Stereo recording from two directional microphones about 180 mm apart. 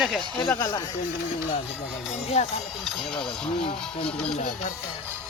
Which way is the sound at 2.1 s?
35° left (ahead or behind).